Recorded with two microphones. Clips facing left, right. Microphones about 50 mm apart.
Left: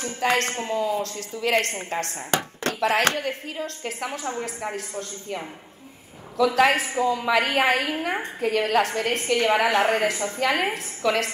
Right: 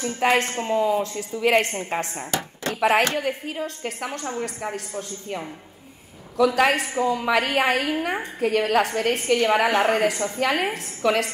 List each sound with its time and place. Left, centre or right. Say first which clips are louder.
0.2 s a woman's voice: right 2 dB; centre
3.2 s a woman's voice: right 2 dB; centre